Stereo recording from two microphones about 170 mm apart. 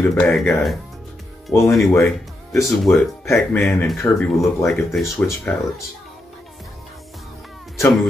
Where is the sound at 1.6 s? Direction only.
Centre (ahead or behind).